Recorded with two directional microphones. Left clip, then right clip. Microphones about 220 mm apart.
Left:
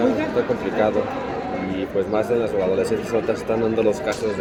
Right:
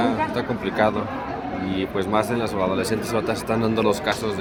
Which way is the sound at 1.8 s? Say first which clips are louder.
Even; 45° right (ahead or behind).